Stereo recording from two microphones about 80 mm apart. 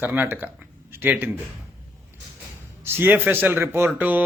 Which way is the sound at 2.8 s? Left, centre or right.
Right.